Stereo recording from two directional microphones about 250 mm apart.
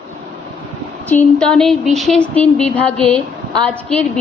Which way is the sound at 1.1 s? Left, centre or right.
Centre.